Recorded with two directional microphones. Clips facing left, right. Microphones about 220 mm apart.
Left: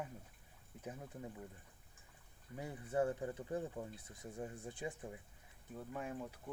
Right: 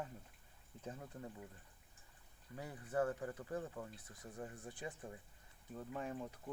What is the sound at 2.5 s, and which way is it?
Speech, 20° left (ahead or behind).